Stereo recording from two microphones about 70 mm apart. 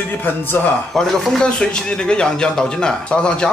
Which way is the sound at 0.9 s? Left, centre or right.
Centre.